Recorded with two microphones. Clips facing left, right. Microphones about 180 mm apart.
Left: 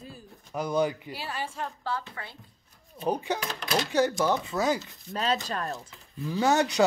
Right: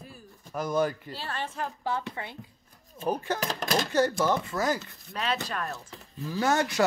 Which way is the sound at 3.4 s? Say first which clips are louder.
Right 1 dB; 45° right (ahead or behind).